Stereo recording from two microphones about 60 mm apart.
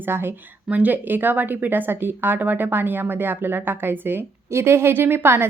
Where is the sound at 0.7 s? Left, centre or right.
Right.